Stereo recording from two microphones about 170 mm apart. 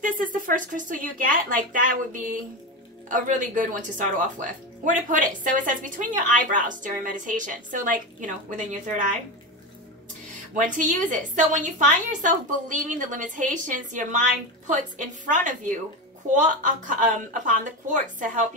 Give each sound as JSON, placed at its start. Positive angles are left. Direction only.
{"t": 0.0, "sound": "speech", "side_deg": -50}
{"t": 10.6, "sound": "speech", "side_deg": -50}